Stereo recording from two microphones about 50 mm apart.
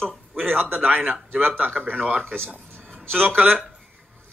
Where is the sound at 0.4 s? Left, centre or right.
Right.